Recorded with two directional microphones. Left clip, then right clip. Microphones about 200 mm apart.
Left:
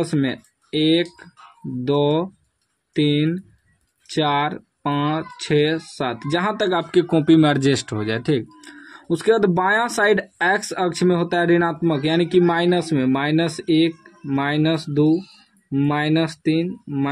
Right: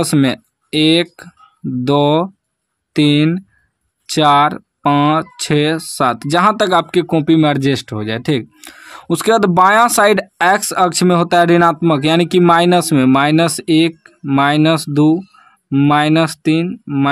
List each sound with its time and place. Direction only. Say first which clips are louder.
0.0 s speech: right 7 dB; 45° right (ahead or behind)
6.9 s speech: right 3 dB; 25° right (ahead or behind); by 17.1 s 55° right (ahead or behind)